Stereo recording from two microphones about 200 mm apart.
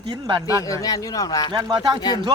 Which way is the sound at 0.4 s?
15° left (ahead or behind).